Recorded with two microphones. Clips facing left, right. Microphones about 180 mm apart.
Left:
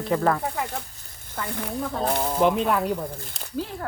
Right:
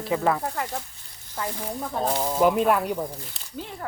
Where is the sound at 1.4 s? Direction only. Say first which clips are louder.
Even; 60° left (ahead or behind).